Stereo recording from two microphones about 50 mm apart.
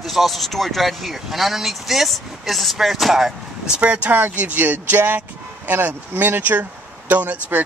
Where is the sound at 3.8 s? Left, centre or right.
Right.